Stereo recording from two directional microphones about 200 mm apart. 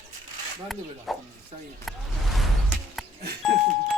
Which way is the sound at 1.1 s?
Centre (ahead or behind).